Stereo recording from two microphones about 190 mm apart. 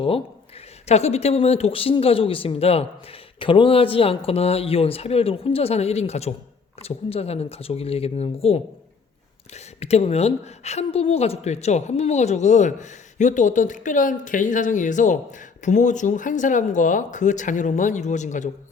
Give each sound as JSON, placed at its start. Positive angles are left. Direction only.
{"t": 0.9, "sound": "speech", "side_deg": 35}